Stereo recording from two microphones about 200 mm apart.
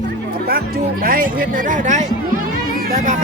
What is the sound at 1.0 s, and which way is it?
Speech, 45° right (ahead or behind).